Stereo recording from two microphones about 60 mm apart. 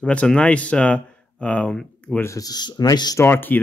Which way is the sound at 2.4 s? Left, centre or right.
Left.